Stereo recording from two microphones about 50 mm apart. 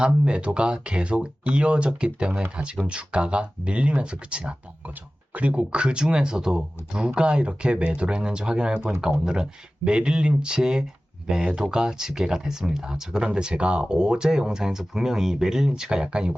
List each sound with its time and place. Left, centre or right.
0.0 s speech: centre